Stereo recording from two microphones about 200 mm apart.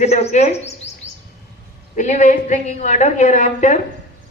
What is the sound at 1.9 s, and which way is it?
A woman's voice, 35° left (ahead or behind).